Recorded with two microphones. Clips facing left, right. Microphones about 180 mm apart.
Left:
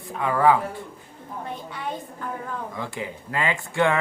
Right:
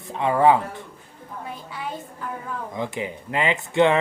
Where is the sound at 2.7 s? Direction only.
20° right (ahead or behind).